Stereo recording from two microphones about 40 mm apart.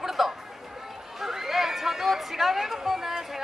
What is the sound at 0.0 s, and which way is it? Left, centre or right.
Chatter, centre.